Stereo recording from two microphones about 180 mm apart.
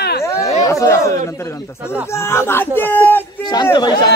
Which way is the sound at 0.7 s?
15° left (ahead or behind).